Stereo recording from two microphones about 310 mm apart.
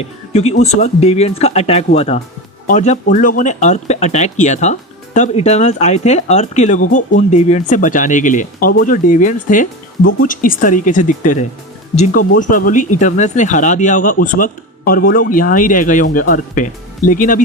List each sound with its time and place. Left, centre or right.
0.3 s speech: left